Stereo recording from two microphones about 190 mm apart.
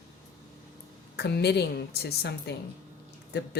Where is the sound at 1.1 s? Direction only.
60° left (ahead or behind).